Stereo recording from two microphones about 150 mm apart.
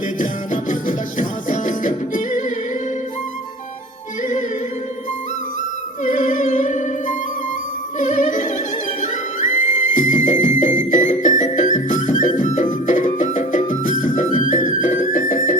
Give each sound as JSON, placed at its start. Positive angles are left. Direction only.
{"t": 0.2, "sound": "music", "side_deg": 60}
{"t": 4.2, "sound": "music", "side_deg": 55}
{"t": 6.0, "sound": "music", "side_deg": 60}